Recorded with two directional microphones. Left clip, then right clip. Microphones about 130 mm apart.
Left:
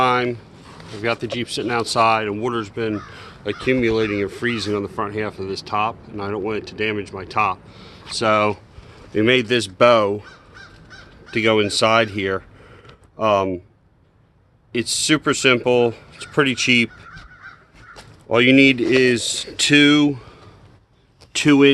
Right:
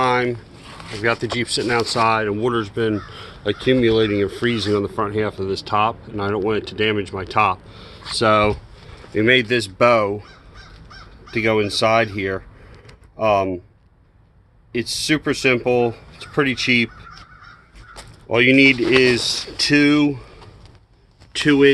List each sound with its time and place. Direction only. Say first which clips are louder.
0.0 s a sound: even; 15° left (ahead or behind)
1.0 s speech: right 2 dB; 5° left (ahead or behind)
2.1 s speech: right 2 dB; 20° right (ahead or behind)
3.8 s speech: right 3 dB; 25° right (ahead or behind)
9.3 s speech: right 3 dB; 20° left (ahead or behind)
11.3 s speech: left 1 dB; 25° left (ahead or behind)
14.7 s speech: left 1 dB; 25° left (ahead or behind)
18.3 s speech: even; 30° left (ahead or behind)
21.3 s speech: even; 40° left (ahead or behind)